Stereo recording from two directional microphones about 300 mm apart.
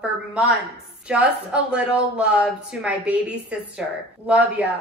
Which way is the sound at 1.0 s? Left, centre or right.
Centre.